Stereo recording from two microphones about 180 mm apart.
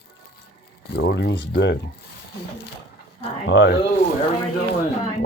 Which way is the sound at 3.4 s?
90° left.